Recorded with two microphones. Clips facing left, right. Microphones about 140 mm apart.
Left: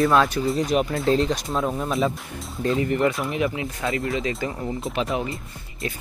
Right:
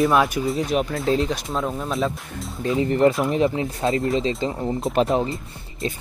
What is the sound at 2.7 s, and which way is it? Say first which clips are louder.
Speech: right 5 dB; 30° right (ahead or behind).